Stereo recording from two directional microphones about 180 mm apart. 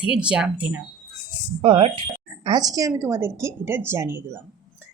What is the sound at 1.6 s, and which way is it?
Speech, 30° right (ahead or behind).